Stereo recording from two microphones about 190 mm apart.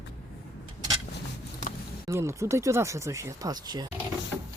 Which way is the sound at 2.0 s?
15° right (ahead or behind).